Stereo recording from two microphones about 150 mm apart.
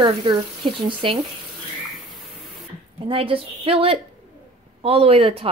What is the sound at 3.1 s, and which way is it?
Speech, 35° right (ahead or behind).